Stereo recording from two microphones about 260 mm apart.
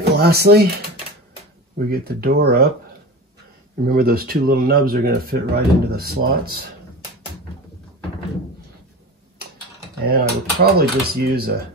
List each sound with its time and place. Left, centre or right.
0.0 s speech: right
1.9 s speech: right
3.8 s speech: right
10.0 s speech: right